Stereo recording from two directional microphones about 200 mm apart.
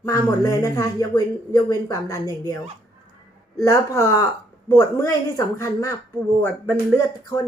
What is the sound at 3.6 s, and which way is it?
Speech, 15° left (ahead or behind).